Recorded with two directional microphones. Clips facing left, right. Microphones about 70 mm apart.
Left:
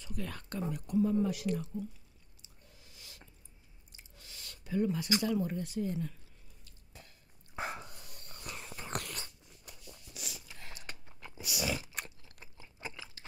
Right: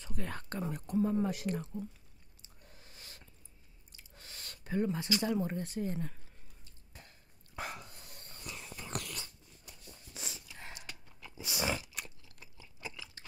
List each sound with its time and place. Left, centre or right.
0.0 s speech: right
2.4 s a sound: right
5.2 s speech: right
7.5 s dog: left
8.5 s a sound: left
9.8 s a sound: right
11.1 s biting: left
11.4 s biting: right
11.8 s crunch: left